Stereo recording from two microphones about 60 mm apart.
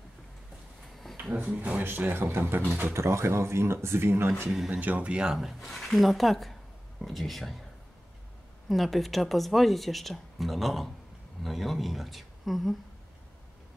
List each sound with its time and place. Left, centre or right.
1.3 s speech: right
1.9 s speech: right
4.6 s speech: right
5.3 s speech: centre
8.6 s speech: centre